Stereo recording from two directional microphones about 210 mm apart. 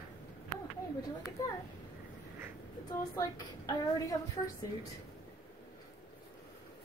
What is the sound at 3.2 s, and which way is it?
Speech, 15° left (ahead or behind).